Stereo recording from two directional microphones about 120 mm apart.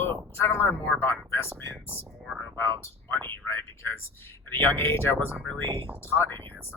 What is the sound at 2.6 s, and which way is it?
Speech, 20° left (ahead or behind).